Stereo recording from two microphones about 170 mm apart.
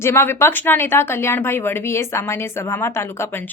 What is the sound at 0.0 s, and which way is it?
Speech, 15° left (ahead or behind).